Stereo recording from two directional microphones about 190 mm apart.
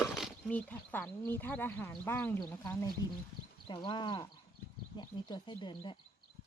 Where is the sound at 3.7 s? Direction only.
25° left (ahead or behind).